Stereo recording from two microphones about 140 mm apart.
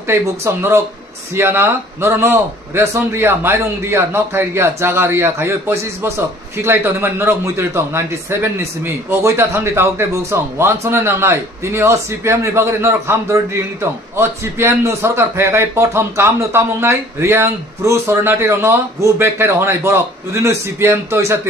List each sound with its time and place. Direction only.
0.0 s a man's voice: 20° right (ahead or behind)